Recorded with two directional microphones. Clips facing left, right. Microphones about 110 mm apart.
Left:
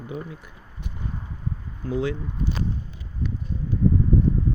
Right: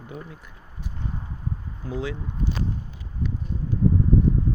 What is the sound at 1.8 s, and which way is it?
Speech, centre (ahead or behind).